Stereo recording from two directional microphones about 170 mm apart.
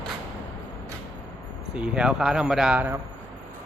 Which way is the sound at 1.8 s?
5° right (ahead or behind).